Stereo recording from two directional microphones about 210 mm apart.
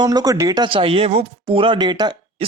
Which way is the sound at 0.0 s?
20° right (ahead or behind).